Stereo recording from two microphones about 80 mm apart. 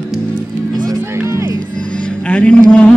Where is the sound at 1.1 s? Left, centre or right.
Right.